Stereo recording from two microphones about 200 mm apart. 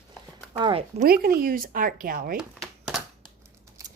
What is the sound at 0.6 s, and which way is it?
Speech, 25° right (ahead or behind).